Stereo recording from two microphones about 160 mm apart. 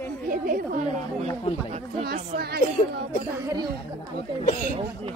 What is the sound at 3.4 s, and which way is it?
Speech, 25° right (ahead or behind).